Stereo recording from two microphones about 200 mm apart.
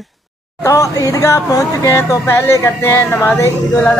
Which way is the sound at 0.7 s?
15° left (ahead or behind).